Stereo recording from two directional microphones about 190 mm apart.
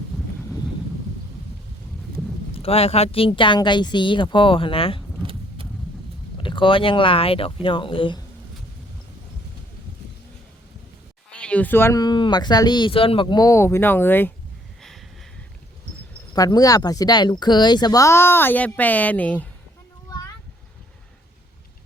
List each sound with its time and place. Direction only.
2.6 s speech: 30° left (ahead or behind)
5.2 s vehicle: 30° right (ahead or behind)
6.3 s speech: 25° left (ahead or behind)
11.3 s speech: 5° left (ahead or behind)
14.8 s a sound: centre (ahead or behind)
16.3 s speech: 20° left (ahead or behind)